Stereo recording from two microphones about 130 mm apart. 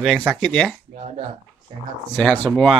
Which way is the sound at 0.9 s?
55° right (ahead or behind).